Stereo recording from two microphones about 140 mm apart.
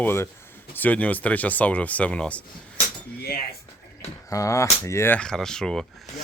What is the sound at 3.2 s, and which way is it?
Speech, 90° left.